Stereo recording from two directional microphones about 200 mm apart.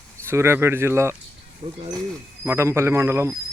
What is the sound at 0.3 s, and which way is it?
A man's voice, 15° right (ahead or behind).